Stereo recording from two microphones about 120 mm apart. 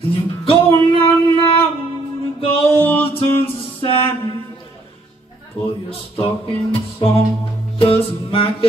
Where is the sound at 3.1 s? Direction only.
50° left (ahead or behind).